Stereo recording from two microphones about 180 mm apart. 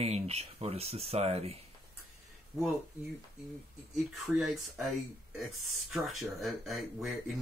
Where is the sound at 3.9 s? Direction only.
Centre (ahead or behind).